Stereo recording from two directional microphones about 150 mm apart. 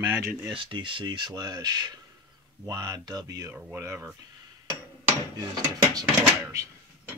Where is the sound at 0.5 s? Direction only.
35° right (ahead or behind).